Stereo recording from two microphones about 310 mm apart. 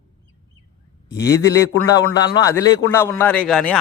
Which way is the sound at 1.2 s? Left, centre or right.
Centre.